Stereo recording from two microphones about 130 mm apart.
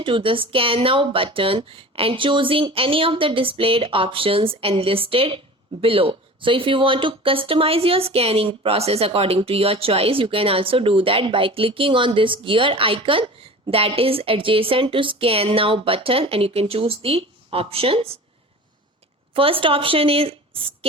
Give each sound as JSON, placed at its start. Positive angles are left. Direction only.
{"t": 0.0, "sound": "speech", "side_deg": -40}
{"t": 19.3, "sound": "speech", "side_deg": -45}